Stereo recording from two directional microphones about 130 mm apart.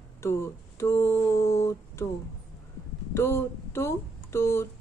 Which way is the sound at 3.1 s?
20° left (ahead or behind).